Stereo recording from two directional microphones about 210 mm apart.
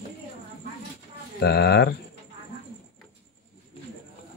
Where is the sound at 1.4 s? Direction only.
50° left (ahead or behind).